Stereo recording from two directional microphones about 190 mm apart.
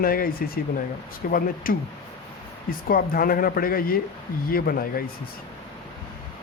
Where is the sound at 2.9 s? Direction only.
50° left (ahead or behind).